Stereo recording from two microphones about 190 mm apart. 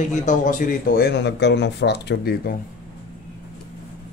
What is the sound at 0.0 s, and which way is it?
Speech, 40° left (ahead or behind).